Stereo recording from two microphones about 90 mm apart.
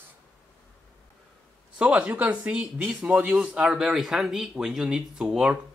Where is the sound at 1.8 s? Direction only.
15° right (ahead or behind).